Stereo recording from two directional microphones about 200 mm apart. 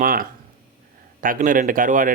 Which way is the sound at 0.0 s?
45° right (ahead or behind).